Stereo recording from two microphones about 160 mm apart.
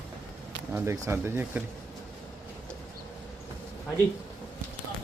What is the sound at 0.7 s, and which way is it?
Speech, 20° right (ahead or behind).